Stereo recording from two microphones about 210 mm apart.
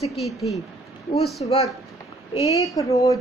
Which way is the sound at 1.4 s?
25° left (ahead or behind).